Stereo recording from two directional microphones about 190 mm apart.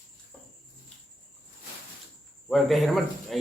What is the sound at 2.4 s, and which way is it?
Speech, centre (ahead or behind).